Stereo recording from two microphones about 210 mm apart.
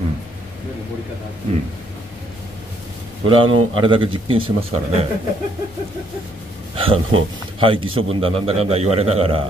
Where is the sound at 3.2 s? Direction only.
25° right (ahead or behind).